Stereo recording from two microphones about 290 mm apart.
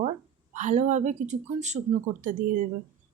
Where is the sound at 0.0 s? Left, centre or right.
Right.